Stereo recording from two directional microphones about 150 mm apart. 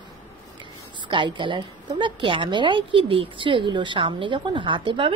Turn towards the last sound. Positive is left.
turn(degrees=-35)  # may be behind; listen again after turning